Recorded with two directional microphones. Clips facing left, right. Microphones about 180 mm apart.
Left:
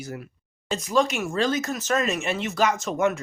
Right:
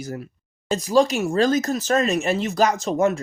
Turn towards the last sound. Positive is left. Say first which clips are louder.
# right 3 dB
turn(degrees=-35)  # may be behind; listen again after turning